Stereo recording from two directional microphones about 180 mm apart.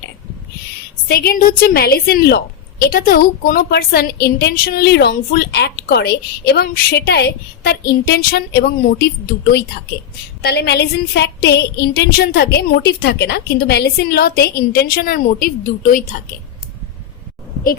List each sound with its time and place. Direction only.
1.0 s a woman's voice: 55° left (ahead or behind)